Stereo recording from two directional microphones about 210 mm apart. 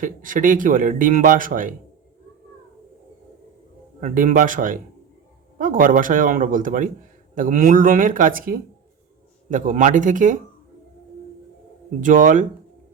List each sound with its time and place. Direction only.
0.0 s speech: 40° right (ahead or behind)
4.0 s speech: 40° right (ahead or behind)
11.9 s speech: 40° right (ahead or behind)